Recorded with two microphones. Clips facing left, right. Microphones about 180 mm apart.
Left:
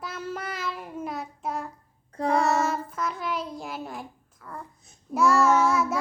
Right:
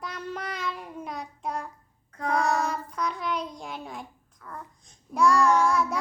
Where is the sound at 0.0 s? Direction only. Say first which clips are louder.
Left 1 dB; 5° left (ahead or behind).